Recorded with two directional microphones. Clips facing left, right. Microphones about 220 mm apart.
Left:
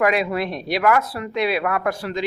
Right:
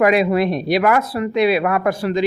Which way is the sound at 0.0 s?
20° right (ahead or behind).